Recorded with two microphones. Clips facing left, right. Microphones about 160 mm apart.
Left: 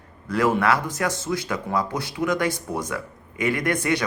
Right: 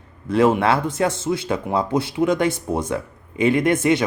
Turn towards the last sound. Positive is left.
turn(degrees=-25)  # may be behind; listen again after turning